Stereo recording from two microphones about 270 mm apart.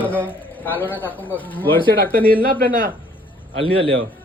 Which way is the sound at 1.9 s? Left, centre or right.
Right.